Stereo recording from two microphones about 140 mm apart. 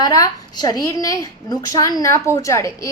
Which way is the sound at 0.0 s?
25° left (ahead or behind).